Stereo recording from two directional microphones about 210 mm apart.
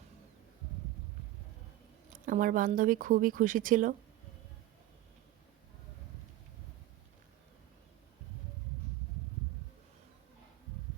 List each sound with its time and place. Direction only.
2.2 s speech: 40° right (ahead or behind)